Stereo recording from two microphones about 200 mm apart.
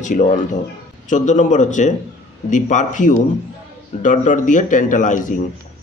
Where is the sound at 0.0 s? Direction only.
40° left (ahead or behind).